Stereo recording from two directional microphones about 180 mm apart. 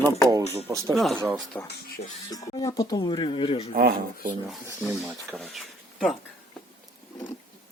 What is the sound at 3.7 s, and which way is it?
Speech, 55° right (ahead or behind).